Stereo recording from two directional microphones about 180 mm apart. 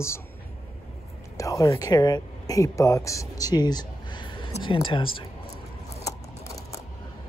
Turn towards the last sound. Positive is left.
turn(degrees=20)  # may be behind; listen again after turning